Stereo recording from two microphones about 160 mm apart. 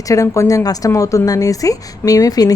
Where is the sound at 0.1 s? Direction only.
20° left (ahead or behind).